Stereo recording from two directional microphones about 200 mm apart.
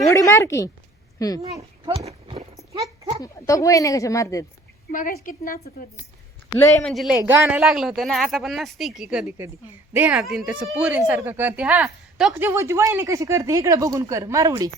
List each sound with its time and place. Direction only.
0.1 s speech: 15° left (ahead or behind)
1.5 s speech: 15° right (ahead or behind)
2.0 s clip-clop: 30° right (ahead or behind)
2.6 s goat: 15° right (ahead or behind)
3.2 s speech: 15° left (ahead or behind)
4.9 s a woman's voice: 40° left (ahead or behind)
6.6 s speech: 15° left (ahead or behind)
6.9 s speech: centre (ahead or behind); by 14.7 s 15° right (ahead or behind)